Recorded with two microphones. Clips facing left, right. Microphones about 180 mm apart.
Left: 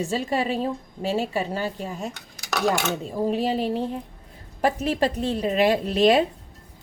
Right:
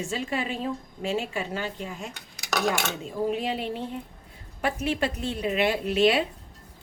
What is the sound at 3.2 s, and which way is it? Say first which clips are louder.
Speech: left 4 dB; 35° left (ahead or behind).